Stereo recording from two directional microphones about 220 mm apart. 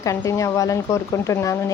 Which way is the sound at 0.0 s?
15° left (ahead or behind).